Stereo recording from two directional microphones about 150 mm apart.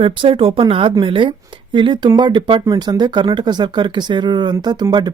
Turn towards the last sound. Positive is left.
turn(degrees=-30)  # may be behind; listen again after turning